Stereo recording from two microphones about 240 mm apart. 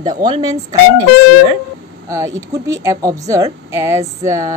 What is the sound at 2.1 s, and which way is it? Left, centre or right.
Speech, centre.